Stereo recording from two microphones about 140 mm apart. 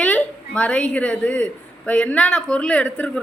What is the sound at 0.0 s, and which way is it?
Speech, 10° left (ahead or behind).